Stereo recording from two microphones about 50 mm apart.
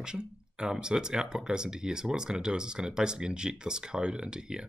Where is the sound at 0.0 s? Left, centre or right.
Centre.